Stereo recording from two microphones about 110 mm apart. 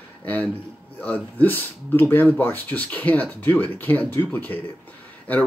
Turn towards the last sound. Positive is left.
turn(degrees=15)  # may be behind; listen again after turning